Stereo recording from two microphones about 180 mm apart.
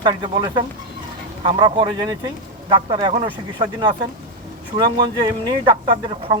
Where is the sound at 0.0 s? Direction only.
25° right (ahead or behind).